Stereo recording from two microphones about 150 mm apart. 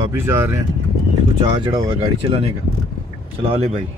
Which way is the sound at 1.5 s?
35° right (ahead or behind).